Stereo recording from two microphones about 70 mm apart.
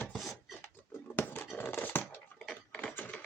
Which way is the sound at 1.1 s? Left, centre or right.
Left.